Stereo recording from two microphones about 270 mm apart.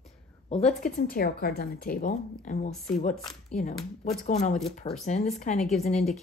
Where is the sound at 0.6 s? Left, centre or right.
Left.